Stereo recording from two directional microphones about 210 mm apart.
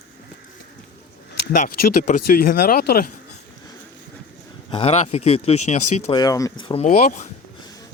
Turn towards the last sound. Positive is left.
turn(degrees=35)  # may be behind; listen again after turning